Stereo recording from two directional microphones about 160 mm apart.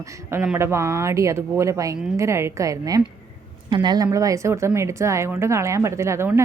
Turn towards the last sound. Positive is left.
turn(degrees=-15)  # may be behind; listen again after turning